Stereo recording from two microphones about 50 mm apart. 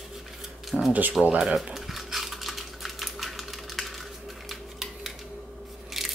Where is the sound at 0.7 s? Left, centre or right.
Centre.